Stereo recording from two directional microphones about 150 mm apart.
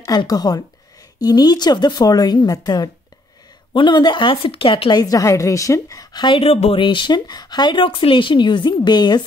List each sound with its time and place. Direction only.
0.0 s a woman's voice: 25° left (ahead or behind)